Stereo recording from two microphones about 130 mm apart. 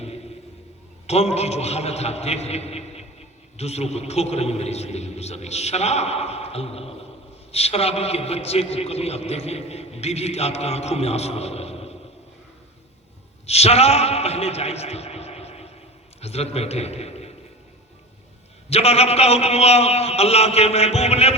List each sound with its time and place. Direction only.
1.0 s a man's voice: 55° left (ahead or behind)
13.5 s a man's voice: 55° left (ahead or behind)
18.7 s a man's voice: 55° left (ahead or behind)